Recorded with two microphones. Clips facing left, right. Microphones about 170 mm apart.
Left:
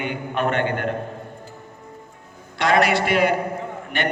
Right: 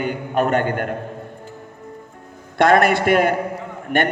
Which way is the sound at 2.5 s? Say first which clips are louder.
Right 4 dB; 50° right (ahead or behind).